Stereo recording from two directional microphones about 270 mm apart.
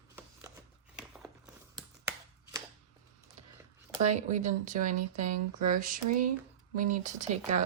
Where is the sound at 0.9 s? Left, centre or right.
Centre.